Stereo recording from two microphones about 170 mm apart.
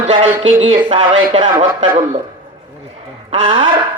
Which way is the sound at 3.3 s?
30° right (ahead or behind).